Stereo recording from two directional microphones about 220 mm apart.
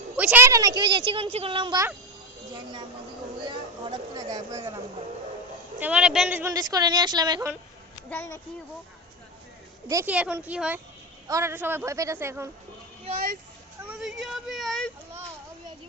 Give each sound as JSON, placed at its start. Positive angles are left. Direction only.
{"t": 0.2, "sound": "a woman's voice", "side_deg": -10}
{"t": 3.4, "sound": "a sound", "side_deg": -20}
{"t": 5.8, "sound": "a woman's voice", "side_deg": -5}
{"t": 8.1, "sound": "a woman's voice", "side_deg": 10}
{"t": 9.9, "sound": "a woman's voice", "side_deg": -10}
{"t": 13.8, "sound": "speech", "side_deg": -5}